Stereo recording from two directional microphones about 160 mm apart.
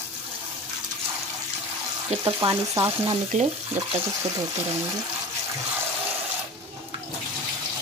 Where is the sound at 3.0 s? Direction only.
40° right (ahead or behind).